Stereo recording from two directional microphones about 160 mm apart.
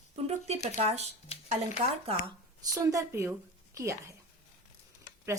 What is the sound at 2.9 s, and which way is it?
A woman's voice, 15° right (ahead or behind).